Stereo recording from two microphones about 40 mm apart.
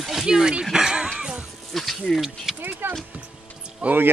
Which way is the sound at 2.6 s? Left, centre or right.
Right.